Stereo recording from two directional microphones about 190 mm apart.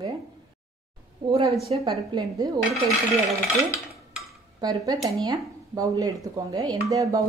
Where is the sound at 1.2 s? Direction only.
30° right (ahead or behind).